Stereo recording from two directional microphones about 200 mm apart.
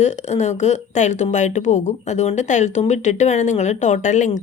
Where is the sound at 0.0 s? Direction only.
35° left (ahead or behind).